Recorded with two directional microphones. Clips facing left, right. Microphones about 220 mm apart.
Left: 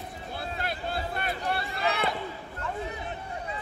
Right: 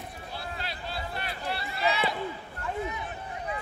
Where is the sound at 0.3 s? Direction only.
50° left (ahead or behind).